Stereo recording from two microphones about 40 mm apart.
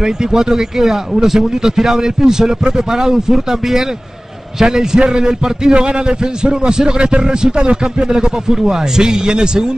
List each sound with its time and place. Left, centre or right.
0.0 s a man's voice: centre